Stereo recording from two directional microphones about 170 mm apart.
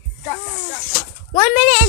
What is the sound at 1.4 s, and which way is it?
Speech, 35° left (ahead or behind).